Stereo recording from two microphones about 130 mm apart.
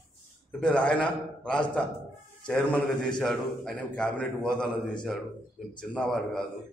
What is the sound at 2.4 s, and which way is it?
A man's voice, 5° left (ahead or behind).